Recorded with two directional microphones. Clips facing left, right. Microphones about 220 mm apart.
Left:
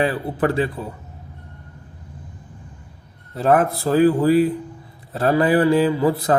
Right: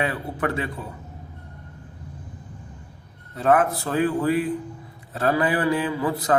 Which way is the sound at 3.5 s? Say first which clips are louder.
Left 3 dB; 35° left (ahead or behind).